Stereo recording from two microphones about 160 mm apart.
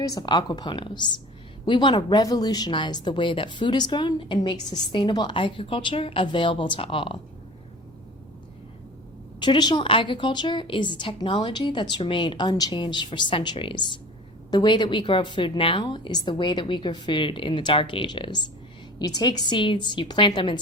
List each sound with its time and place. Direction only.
0.1 s a woman's voice: 25° left (ahead or behind)
9.4 s a woman's voice: 30° left (ahead or behind)